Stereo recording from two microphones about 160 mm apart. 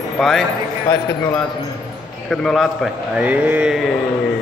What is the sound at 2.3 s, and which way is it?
A man's voice, centre (ahead or behind).